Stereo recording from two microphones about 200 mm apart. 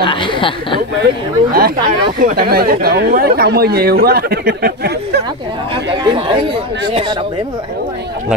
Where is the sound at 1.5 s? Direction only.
50° right (ahead or behind).